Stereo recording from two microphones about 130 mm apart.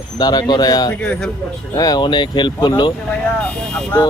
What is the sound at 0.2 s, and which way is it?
Speech, 30° left (ahead or behind).